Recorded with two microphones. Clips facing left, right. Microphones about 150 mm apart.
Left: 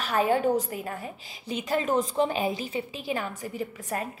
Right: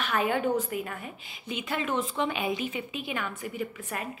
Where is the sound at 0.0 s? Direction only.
35° left (ahead or behind).